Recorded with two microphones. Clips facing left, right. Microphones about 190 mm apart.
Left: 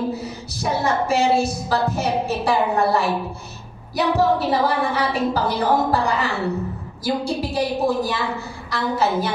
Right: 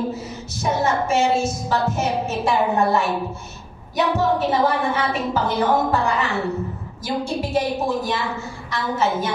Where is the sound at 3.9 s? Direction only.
35° left (ahead or behind).